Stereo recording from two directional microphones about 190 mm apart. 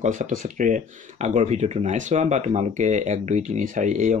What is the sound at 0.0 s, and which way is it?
Speech, 40° right (ahead or behind).